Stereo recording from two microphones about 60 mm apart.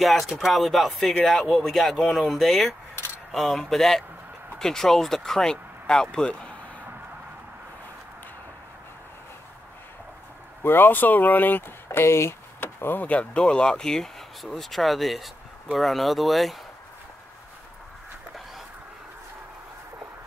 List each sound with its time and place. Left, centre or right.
0.0 s speech: centre
10.6 s speech: left
13.0 s speech: left; by 16.5 s centre